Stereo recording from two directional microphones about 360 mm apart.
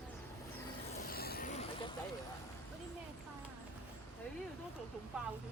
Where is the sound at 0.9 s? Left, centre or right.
Left.